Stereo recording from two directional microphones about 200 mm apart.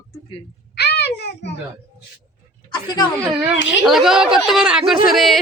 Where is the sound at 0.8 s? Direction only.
55° left (ahead or behind).